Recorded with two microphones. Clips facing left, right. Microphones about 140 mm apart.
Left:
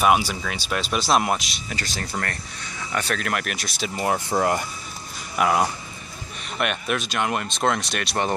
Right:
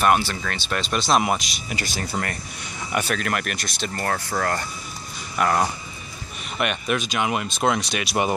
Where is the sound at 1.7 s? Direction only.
10° right (ahead or behind).